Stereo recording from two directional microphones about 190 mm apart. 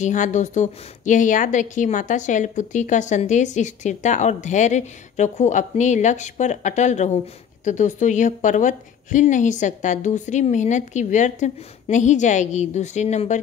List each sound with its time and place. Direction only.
0.0 s speech: 40° left (ahead or behind)